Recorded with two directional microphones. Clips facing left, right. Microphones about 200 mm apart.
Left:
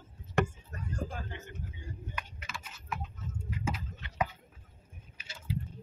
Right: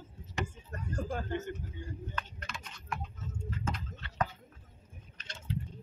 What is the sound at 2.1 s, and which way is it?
Typing, 5° left (ahead or behind).